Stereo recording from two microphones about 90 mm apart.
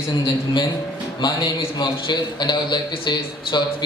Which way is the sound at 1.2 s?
55° left (ahead or behind).